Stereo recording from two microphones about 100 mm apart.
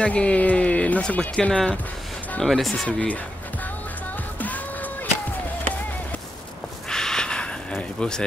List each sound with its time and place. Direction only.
0.0 s speech: 10° left (ahead or behind)
4.4 s music: 15° left (ahead or behind)
6.9 s a sound: 5° left (ahead or behind)